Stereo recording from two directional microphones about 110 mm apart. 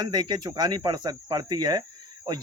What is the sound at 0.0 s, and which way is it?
Speech, 40° right (ahead or behind).